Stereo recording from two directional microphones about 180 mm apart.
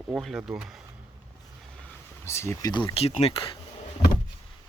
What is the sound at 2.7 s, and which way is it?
Speech, 25° left (ahead or behind).